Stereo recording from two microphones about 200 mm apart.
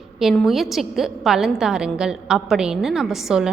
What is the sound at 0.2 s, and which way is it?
A woman's voice, centre (ahead or behind).